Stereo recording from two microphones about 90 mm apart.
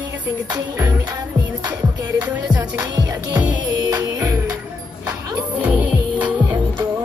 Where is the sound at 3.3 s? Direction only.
15° right (ahead or behind).